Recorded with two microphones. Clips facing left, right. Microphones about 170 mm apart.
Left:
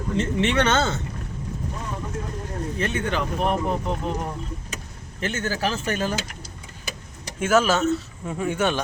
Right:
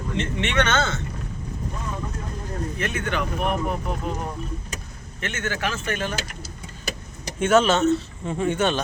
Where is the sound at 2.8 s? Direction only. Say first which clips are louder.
Left 2 dB; 30° left (ahead or behind).